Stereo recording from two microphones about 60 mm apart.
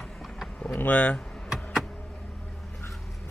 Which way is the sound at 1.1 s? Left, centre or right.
Centre.